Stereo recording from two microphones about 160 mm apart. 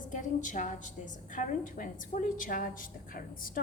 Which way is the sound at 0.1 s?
50° left (ahead or behind).